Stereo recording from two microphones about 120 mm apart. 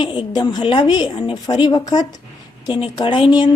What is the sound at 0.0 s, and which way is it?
Speech, 40° left (ahead or behind).